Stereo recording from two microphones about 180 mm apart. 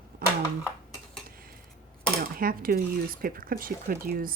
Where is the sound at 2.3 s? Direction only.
55° right (ahead or behind).